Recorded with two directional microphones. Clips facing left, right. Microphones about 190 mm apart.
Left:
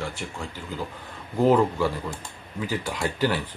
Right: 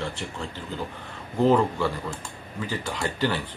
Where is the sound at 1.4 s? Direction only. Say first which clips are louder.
Left 1 dB; 10° left (ahead or behind).